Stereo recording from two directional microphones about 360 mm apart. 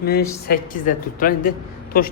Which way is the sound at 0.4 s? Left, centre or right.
Left.